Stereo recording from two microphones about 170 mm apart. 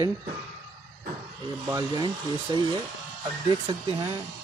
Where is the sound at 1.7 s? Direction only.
15° right (ahead or behind).